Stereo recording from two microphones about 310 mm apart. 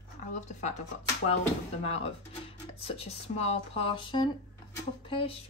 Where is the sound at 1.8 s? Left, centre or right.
Centre.